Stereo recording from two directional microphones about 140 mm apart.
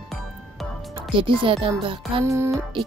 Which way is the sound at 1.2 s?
40° right (ahead or behind).